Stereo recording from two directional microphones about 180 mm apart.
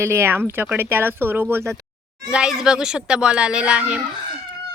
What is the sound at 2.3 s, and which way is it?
Speech, 5° right (ahead or behind).